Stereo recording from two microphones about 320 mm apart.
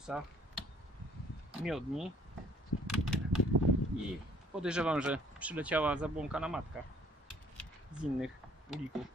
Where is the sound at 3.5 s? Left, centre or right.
Right.